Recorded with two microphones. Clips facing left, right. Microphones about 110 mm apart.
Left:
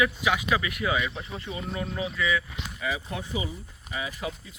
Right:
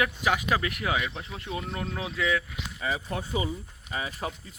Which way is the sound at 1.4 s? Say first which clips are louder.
Even; 60° right (ahead or behind).